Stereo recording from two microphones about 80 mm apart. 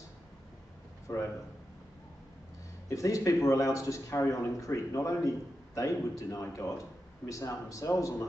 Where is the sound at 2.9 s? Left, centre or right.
Left.